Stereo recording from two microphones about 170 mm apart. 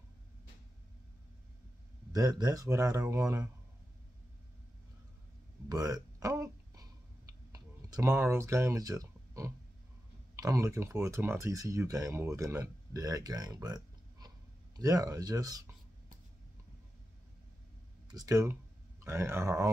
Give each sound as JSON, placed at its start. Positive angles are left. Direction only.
{"t": 2.1, "sound": "speech", "side_deg": -20}
{"t": 5.7, "sound": "a sound", "side_deg": -20}
{"t": 7.5, "sound": "speech", "side_deg": -20}
{"t": 18.0, "sound": "speech", "side_deg": -20}